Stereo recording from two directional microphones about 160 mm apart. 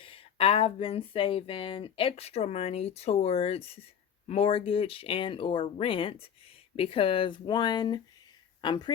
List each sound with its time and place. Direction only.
0.0 s speech: 35° left (ahead or behind)